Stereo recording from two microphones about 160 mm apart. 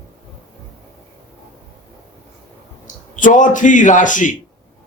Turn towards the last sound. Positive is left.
turn(degrees=55)  # may be behind; listen again after turning